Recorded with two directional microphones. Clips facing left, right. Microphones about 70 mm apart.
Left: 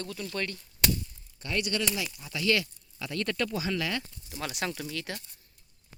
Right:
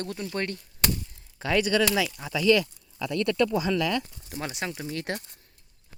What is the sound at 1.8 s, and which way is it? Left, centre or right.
Speech, right.